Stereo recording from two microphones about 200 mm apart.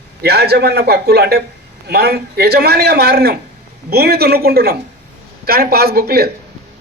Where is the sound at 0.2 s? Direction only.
50° right (ahead or behind).